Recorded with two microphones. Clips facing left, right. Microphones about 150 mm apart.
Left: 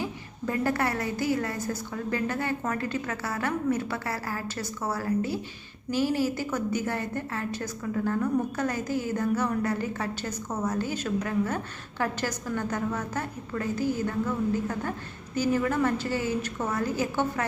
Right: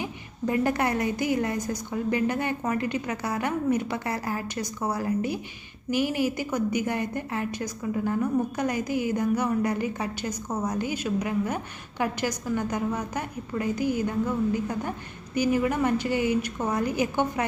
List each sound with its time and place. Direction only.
0.0 s a woman's voice: 15° right (ahead or behind)